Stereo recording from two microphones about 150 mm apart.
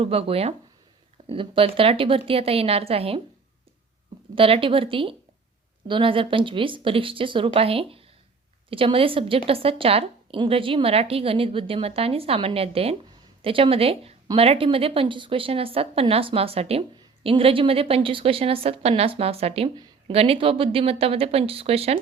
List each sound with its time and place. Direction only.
0.0 s a woman's voice: 40° right (ahead or behind)
4.4 s a woman's voice: 35° right (ahead or behind)